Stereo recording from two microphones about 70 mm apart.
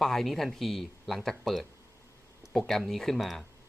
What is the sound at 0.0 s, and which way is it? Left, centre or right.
Speech, centre.